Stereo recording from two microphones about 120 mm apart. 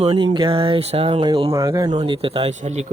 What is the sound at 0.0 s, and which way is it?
A man's voice, 50° right (ahead or behind).